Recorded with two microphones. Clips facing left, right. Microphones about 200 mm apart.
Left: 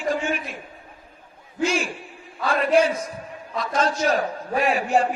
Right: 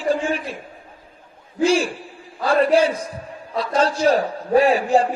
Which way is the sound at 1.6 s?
30° right (ahead or behind).